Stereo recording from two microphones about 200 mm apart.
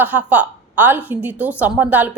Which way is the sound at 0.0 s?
10° right (ahead or behind).